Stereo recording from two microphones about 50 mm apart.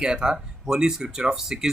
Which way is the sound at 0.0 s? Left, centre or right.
Centre.